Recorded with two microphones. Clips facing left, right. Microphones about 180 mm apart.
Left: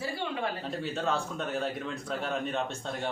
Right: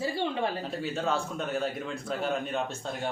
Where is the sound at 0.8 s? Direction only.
Centre (ahead or behind).